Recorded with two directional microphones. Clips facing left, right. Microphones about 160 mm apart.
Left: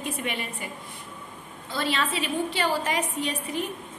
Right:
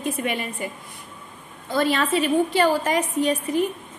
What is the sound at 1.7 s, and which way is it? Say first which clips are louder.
A woman's voice: right 7 dB; 45° right (ahead or behind).